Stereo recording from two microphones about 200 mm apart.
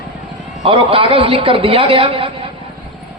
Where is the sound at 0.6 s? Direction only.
25° right (ahead or behind).